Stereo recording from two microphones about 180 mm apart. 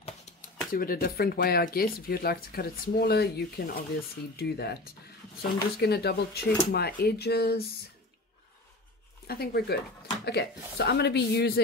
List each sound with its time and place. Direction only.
0.0 s a sound: 35° left (ahead or behind)
0.7 s speech: 55° left (ahead or behind)
9.3 s speech: 60° left (ahead or behind)